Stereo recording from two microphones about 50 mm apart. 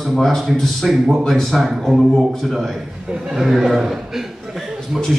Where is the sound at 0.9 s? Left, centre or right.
Centre.